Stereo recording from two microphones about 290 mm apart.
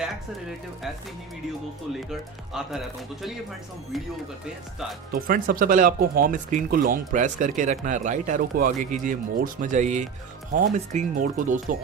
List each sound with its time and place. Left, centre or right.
2.0 s speech: centre
5.1 s speech: right